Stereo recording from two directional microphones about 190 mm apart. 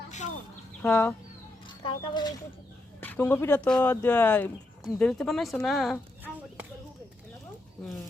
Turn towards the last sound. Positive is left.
turn(degrees=-5)  # may be behind; listen again after turning